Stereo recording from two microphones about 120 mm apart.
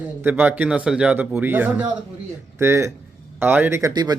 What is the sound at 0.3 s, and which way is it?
A man's voice, 15° right (ahead or behind).